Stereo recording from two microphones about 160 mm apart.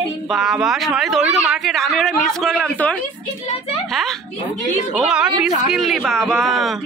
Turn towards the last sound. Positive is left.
turn(degrees=0)  # may be behind; listen again after turning